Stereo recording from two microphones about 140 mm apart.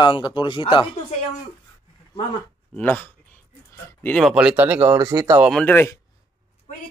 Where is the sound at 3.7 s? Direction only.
20° left (ahead or behind).